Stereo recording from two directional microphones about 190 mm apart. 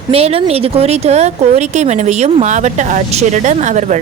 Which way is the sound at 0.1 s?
30° right (ahead or behind).